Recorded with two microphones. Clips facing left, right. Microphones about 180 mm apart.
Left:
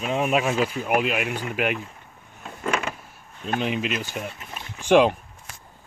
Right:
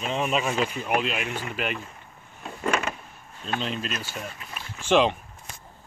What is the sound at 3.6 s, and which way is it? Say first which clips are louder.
Speech: left 5 dB; 15° left (ahead or behind).